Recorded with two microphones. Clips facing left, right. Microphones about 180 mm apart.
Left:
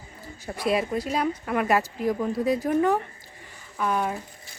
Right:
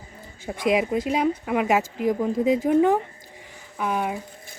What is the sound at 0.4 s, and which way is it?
Speech, 15° right (ahead or behind).